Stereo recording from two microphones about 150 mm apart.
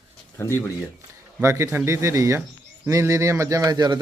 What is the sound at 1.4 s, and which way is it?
Speech, 20° right (ahead or behind).